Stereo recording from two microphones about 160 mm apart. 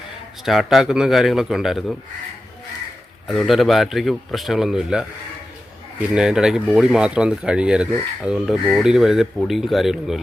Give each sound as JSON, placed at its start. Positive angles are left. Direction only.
{"t": 0.4, "sound": "speech", "side_deg": 0}
{"t": 3.2, "sound": "speech", "side_deg": 0}